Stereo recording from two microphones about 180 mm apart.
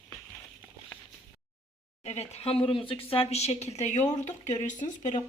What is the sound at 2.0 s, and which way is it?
Speech, 35° left (ahead or behind).